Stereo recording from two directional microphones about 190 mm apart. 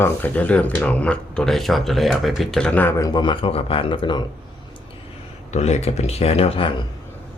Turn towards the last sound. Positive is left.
turn(degrees=25)  # may be behind; listen again after turning